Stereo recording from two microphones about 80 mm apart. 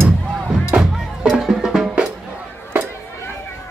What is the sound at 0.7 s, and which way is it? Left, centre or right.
Music, centre.